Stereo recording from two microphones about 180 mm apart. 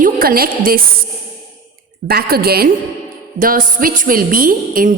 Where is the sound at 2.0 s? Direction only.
55° right (ahead or behind).